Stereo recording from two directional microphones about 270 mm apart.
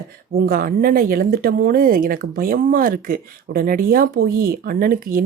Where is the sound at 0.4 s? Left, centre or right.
Right.